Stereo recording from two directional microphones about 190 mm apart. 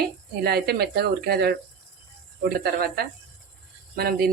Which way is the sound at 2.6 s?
55° right (ahead or behind).